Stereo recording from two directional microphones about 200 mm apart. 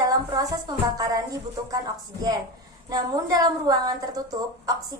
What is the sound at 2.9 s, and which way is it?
A woman's voice, 20° right (ahead or behind).